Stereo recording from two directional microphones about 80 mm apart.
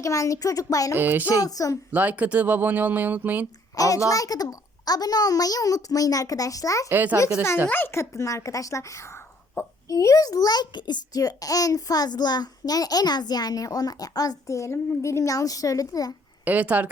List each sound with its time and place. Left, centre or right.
0.0 s a child's voice: left
0.9 s speech: right
1.3 s a child's voice: left
1.9 s speech: centre
3.8 s a child's voice: left
6.9 s speech: right
7.7 s a woman's voice: left
9.9 s a child's voice: left
16.4 s speech: centre